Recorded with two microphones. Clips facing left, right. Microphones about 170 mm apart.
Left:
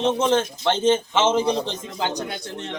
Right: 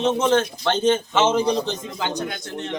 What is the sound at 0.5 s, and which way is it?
A man's voice, 25° left (ahead or behind).